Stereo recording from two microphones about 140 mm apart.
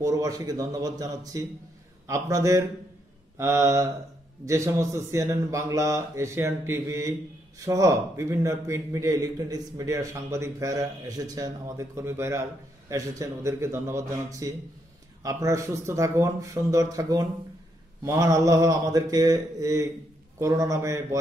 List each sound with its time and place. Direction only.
0.0 s a man's voice: 25° right (ahead or behind)